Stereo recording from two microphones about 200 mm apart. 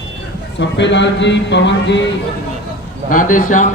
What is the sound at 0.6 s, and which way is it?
Speech, 60° left (ahead or behind).